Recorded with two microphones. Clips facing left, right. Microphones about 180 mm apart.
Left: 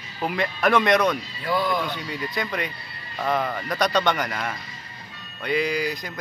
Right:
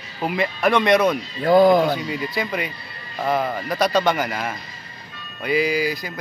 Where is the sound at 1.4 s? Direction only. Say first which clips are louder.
Right 11 dB; 45° right (ahead or behind).